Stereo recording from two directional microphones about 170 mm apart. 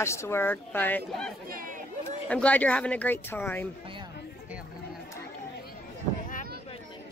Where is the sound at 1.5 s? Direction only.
55° right (ahead or behind).